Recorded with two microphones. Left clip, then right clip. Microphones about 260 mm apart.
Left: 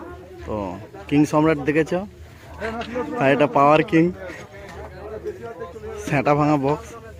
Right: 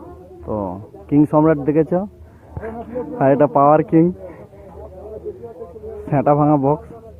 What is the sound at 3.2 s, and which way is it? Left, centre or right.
Speech, centre.